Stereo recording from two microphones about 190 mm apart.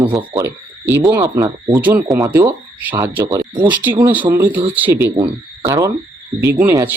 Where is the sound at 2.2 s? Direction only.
15° right (ahead or behind).